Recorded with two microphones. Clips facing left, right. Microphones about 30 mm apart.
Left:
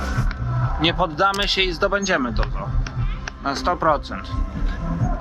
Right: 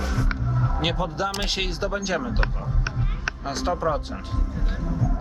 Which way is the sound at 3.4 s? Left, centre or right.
Left.